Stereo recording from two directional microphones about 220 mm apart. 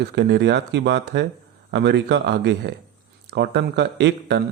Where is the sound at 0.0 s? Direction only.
50° right (ahead or behind).